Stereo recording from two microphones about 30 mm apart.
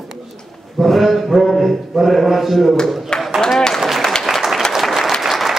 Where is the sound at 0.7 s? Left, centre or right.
Centre.